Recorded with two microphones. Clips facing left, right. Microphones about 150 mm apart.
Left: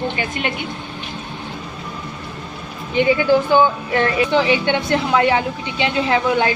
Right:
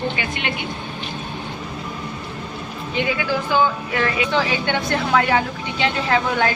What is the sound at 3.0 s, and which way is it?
A woman's voice, 25° left (ahead or behind).